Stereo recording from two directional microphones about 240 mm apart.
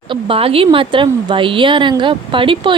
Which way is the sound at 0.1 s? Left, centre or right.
Right.